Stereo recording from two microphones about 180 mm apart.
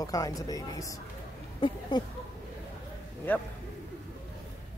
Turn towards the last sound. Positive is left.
turn(degrees=10)  # may be behind; listen again after turning